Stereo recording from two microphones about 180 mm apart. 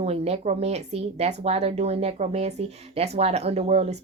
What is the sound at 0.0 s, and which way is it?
Speech, 35° right (ahead or behind).